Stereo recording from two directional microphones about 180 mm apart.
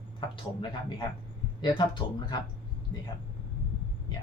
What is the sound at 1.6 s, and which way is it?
Speech, 25° left (ahead or behind).